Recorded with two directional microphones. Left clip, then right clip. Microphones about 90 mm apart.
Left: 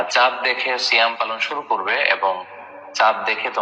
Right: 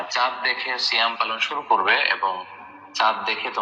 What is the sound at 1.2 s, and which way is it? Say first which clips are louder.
Speech: left 1 dB; 50° left (ahead or behind).